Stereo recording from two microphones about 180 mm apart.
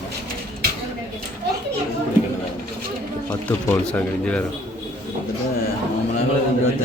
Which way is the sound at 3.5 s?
10° left (ahead or behind).